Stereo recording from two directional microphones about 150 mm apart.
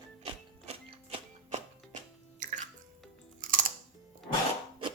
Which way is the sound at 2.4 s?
55° right (ahead or behind).